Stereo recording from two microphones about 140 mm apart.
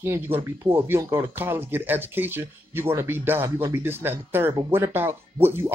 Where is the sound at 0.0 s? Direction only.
15° right (ahead or behind).